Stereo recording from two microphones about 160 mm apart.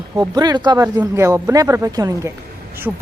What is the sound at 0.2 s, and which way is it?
Speech, 25° right (ahead or behind).